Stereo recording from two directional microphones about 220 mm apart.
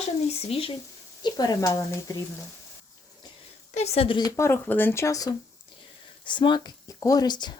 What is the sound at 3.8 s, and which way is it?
A woman's voice, 30° left (ahead or behind).